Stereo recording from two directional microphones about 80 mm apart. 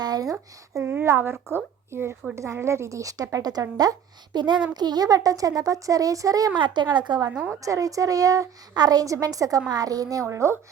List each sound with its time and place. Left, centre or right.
0.0 s speech: right
0.9 s a woman's voice: right
6.6 s speech: right
7.3 s a woman's voice: centre
7.6 s a woman's voice: right
10.2 s a woman's voice: right